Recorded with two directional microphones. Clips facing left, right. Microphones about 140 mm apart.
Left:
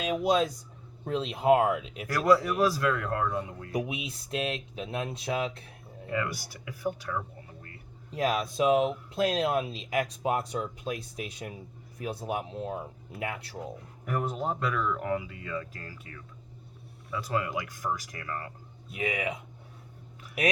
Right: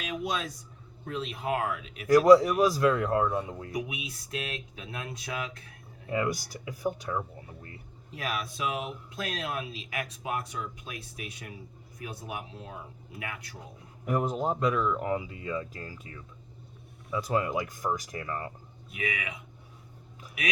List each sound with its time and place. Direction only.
0.0 s speech: 35° left (ahead or behind)
2.0 s a man's voice: 20° right (ahead or behind)
3.7 s speech: 30° left (ahead or behind)
6.1 s a man's voice: 25° right (ahead or behind)
8.1 s speech: 40° left (ahead or behind)
14.0 s a man's voice: 15° right (ahead or behind)
17.1 s a man's voice: 25° right (ahead or behind)
18.9 s speech: 40° left (ahead or behind)